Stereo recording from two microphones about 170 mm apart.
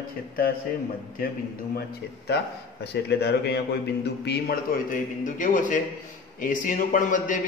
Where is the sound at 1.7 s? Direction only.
70° left (ahead or behind).